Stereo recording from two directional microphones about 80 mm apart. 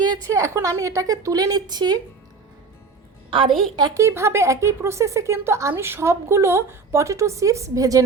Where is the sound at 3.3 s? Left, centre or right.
Right.